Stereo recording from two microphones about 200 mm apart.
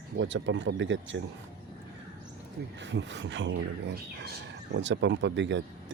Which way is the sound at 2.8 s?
65° right (ahead or behind).